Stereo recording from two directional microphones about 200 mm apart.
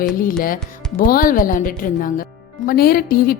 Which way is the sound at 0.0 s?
45° left (ahead or behind).